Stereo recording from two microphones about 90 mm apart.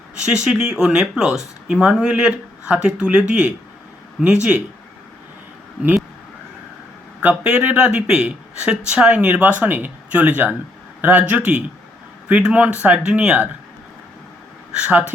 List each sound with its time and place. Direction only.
0.3 s speech: 10° right (ahead or behind)
7.2 s speech: 15° right (ahead or behind)
14.8 s speech: 15° right (ahead or behind)